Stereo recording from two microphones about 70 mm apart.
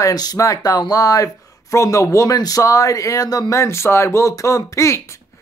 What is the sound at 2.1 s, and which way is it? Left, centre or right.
Speech, left.